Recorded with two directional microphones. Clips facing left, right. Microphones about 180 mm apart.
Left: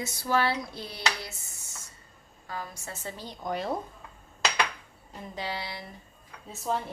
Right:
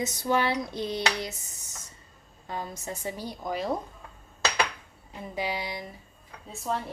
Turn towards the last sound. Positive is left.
turn(degrees=0)  # may be behind; listen again after turning